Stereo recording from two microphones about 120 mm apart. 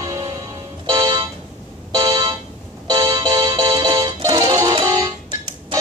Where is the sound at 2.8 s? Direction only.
35° right (ahead or behind).